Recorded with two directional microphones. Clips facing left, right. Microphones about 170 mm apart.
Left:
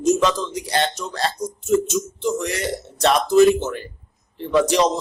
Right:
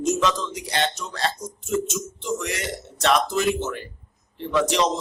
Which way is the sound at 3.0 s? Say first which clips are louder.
Left 7 dB; 35° left (ahead or behind).